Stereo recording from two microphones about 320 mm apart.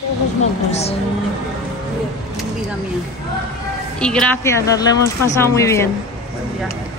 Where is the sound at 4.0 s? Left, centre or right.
Centre.